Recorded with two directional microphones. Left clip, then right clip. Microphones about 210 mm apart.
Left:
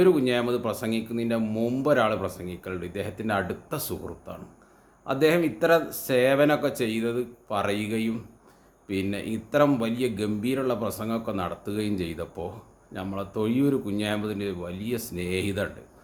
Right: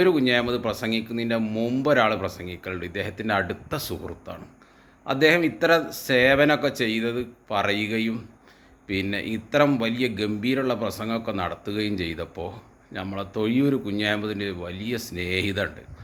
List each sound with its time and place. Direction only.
0.0 s speech: centre (ahead or behind)